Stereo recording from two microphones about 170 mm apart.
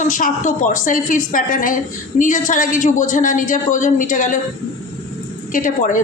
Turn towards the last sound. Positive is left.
turn(degrees=50)  # may be behind; listen again after turning